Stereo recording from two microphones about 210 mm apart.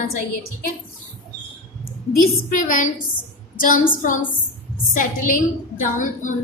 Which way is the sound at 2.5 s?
40° left (ahead or behind).